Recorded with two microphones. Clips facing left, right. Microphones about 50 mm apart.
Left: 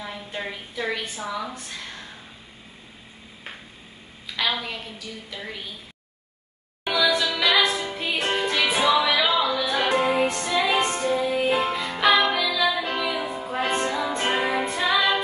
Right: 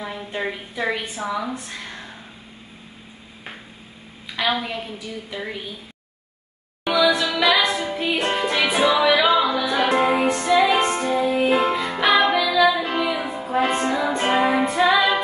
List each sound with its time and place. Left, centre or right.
0.0 s a woman's voice: centre
4.4 s a woman's voice: centre
6.9 s music: right
9.3 s music: right
15.0 s female singing: centre